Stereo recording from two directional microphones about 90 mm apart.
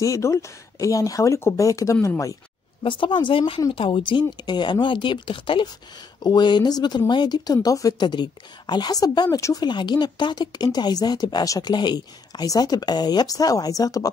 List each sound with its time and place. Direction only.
0.0 s speech: 35° left (ahead or behind)
2.8 s speech: 70° left (ahead or behind)
6.2 s speech: 55° left (ahead or behind)
8.1 s speech: 55° left (ahead or behind); by 9.7 s 40° left (ahead or behind)
9.7 s speech: 55° left (ahead or behind)